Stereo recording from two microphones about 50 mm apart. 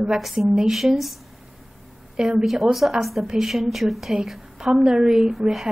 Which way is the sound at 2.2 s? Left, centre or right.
Centre.